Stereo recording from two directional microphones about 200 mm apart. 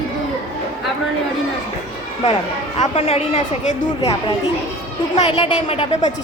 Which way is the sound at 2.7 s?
30° left (ahead or behind).